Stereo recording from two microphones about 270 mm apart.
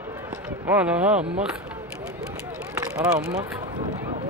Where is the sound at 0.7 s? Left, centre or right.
Centre.